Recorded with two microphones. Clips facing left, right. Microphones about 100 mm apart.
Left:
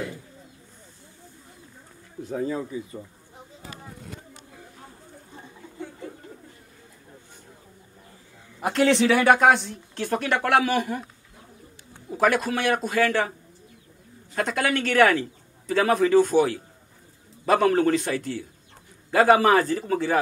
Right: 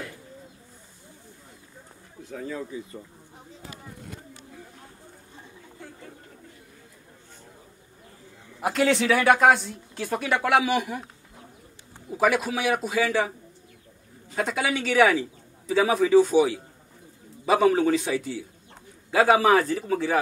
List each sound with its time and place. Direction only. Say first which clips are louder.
2.2 s speech: left 6 dB; 25° left (ahead or behind)
8.5 s speech: left 2 dB; centre (ahead or behind)
12.1 s speech: left 1 dB; 5° right (ahead or behind)
14.3 s speech: left 2 dB; 5° right (ahead or behind)